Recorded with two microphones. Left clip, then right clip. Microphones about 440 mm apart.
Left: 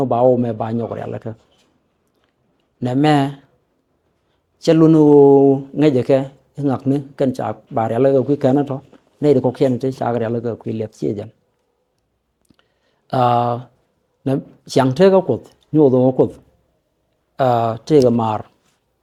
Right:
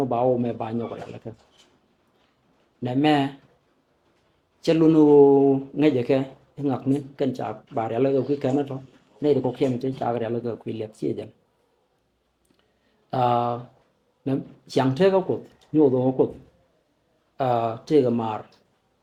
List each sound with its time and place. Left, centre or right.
0.0 s speech: left
2.8 s speech: left
4.6 s speech: left
13.1 s speech: left
14.3 s speech: left
15.7 s speech: left
17.3 s speech: left